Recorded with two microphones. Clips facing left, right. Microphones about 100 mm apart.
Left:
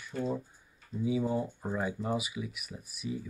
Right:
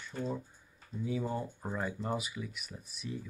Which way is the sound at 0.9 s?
40° right (ahead or behind).